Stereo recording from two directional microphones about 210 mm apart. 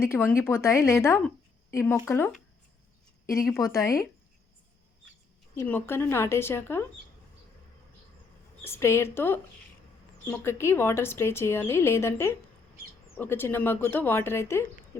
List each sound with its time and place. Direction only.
0.0 s a woman's voice: 10° left (ahead or behind)
3.6 s a woman's voice: 15° left (ahead or behind)
5.5 s a woman's voice: 10° left (ahead or behind)
8.6 s a woman's voice: 10° left (ahead or behind)